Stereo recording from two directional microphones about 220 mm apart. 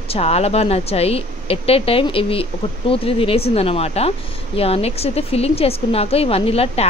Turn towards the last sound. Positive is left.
turn(degrees=25)  # may be behind; listen again after turning